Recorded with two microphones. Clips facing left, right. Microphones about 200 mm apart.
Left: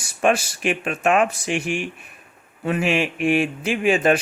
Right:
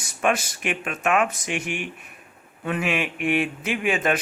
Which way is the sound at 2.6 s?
30° left (ahead or behind).